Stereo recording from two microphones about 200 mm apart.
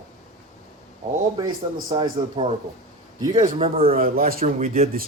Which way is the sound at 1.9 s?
25° right (ahead or behind).